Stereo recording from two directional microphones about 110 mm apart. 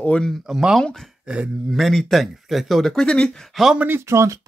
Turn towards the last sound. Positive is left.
turn(degrees=-25)  # may be behind; listen again after turning